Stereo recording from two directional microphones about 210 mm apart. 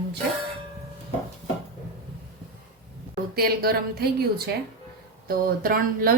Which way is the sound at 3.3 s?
45° right (ahead or behind).